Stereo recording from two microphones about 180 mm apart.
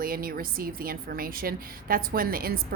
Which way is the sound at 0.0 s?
55° right (ahead or behind).